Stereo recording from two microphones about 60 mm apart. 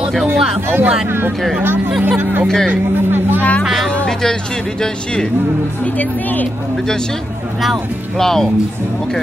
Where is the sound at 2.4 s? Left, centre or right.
Centre.